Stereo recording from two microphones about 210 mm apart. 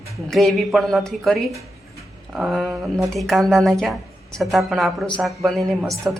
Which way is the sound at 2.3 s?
Centre (ahead or behind).